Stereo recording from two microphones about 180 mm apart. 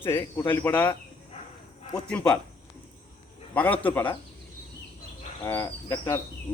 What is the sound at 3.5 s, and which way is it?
Speech, 10° left (ahead or behind).